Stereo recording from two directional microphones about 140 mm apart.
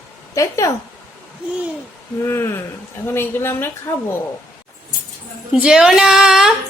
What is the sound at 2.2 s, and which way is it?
Speech, 20° left (ahead or behind).